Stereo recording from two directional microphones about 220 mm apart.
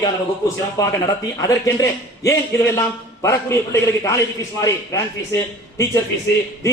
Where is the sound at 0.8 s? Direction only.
15° left (ahead or behind).